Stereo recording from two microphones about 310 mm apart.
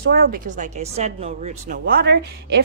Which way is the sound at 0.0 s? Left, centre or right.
Right.